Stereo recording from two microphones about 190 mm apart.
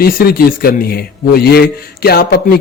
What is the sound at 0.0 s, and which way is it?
A man's voice, 50° left (ahead or behind).